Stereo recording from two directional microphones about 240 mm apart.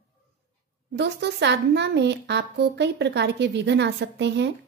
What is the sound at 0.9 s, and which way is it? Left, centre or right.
A woman's voice, right.